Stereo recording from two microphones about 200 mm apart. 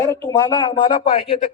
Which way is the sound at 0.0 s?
15° left (ahead or behind).